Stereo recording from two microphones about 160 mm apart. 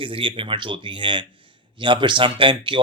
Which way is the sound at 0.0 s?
35° right (ahead or behind).